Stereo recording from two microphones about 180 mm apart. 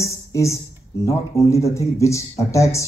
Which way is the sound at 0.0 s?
15° left (ahead or behind).